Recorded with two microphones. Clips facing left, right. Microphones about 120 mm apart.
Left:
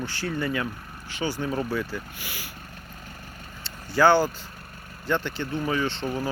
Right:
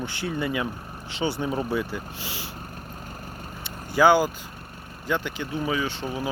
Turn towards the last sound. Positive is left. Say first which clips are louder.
# left 1 dB
turn(degrees=-10)  # may be behind; listen again after turning